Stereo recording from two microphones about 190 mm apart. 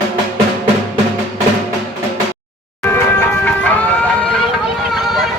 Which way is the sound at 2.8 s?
10° left (ahead or behind).